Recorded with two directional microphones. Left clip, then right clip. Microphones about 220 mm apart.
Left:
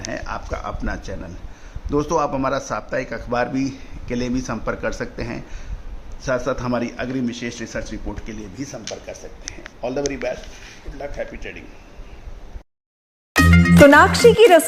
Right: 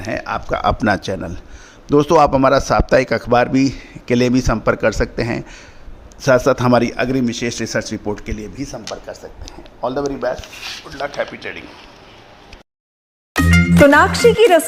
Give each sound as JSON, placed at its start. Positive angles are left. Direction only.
{"t": 0.1, "sound": "a man's voice", "side_deg": -30}
{"t": 13.3, "sound": "speech", "side_deg": 0}